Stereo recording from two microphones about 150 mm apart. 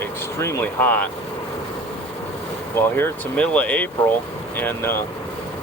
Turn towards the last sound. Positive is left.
turn(degrees=15)  # may be behind; listen again after turning